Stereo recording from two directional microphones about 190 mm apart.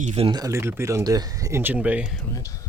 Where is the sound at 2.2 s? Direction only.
15° left (ahead or behind).